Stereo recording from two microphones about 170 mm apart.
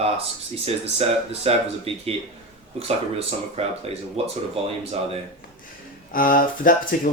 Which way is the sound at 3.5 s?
35° right (ahead or behind).